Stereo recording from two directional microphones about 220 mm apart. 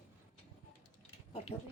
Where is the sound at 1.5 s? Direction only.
25° left (ahead or behind).